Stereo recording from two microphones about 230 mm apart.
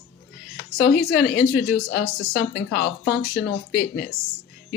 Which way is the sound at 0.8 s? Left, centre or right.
Left.